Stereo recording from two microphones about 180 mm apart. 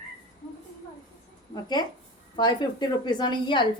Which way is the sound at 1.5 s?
20° left (ahead or behind).